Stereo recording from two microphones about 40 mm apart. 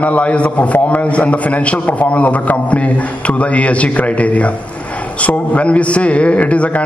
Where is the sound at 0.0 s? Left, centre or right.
Left.